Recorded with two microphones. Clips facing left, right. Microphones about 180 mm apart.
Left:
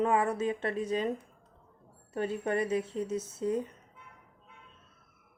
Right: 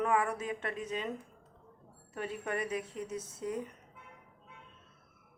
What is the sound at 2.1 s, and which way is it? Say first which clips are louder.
A woman's voice: left 6 dB; 30° left (ahead or behind).